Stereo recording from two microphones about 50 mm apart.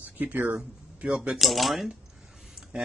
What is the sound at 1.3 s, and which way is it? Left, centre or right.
Speech, centre.